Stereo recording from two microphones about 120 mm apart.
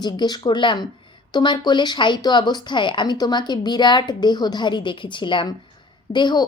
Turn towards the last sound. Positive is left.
turn(degrees=40)  # may be behind; listen again after turning